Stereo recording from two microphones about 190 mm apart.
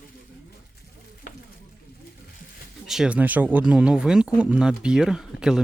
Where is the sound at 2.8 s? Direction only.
5° right (ahead or behind).